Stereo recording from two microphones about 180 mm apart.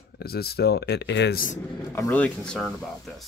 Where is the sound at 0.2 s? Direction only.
60° left (ahead or behind).